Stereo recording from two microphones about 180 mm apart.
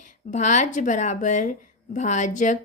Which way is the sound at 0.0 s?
40° left (ahead or behind).